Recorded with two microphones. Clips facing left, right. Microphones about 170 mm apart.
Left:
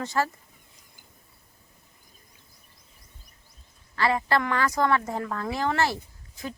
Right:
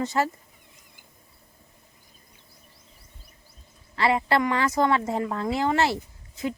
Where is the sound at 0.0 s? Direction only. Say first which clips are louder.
Right 2 dB; 20° right (ahead or behind).